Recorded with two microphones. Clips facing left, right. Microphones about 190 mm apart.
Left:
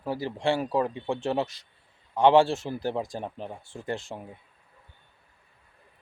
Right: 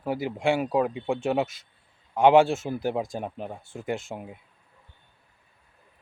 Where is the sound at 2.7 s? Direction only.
15° right (ahead or behind).